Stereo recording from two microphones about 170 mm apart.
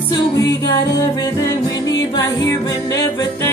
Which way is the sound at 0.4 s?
20° left (ahead or behind).